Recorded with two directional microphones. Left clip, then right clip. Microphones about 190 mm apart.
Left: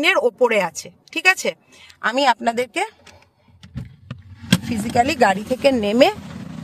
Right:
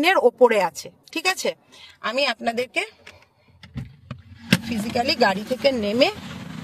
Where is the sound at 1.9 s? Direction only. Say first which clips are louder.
Left 4 dB; 20° left (ahead or behind).